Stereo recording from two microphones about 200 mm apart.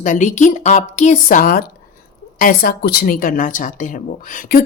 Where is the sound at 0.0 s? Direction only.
40° left (ahead or behind).